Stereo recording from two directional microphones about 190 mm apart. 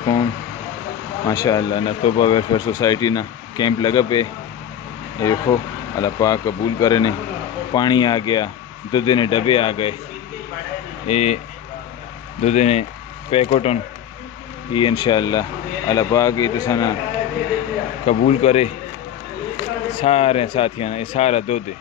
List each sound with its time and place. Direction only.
0.0 s vehicle: 20° left (ahead or behind)
1.2 s speech: 20° left (ahead or behind)
11.1 s speech: 35° left (ahead or behind)
12.4 s speech: 35° left (ahead or behind); by 16.9 s 20° left (ahead or behind)
18.0 s speech: 35° left (ahead or behind)
20.0 s speech: 30° left (ahead or behind)